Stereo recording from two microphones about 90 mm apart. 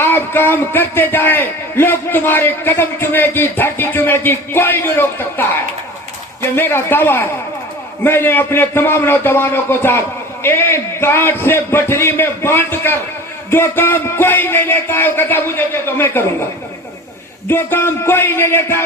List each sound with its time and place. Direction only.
0.0 s a man's voice: 25° left (ahead or behind)
6.6 s a man's voice: 25° left (ahead or behind)
17.5 s a man's voice: 25° left (ahead or behind)